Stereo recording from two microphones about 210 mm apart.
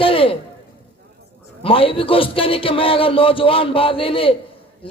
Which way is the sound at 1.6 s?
25° left (ahead or behind).